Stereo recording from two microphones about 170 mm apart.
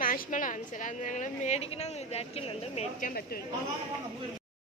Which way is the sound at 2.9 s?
55° left (ahead or behind).